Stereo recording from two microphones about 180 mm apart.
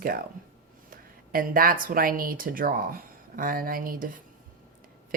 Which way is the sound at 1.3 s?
55° right (ahead or behind).